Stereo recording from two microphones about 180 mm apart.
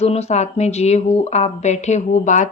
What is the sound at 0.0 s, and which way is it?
A woman's voice, 35° left (ahead or behind).